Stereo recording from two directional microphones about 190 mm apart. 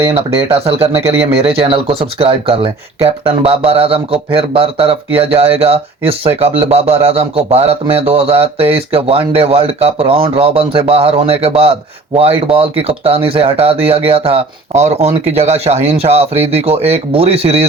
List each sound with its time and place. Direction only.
0.5 s speech: 30° right (ahead or behind)